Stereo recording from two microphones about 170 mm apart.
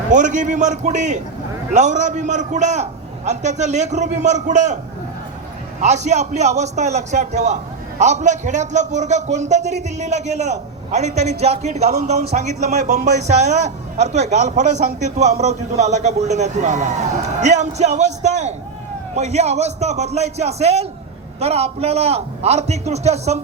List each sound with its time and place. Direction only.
0.1 s a man's voice: 45° right (ahead or behind)
5.8 s a man's voice: 45° right (ahead or behind)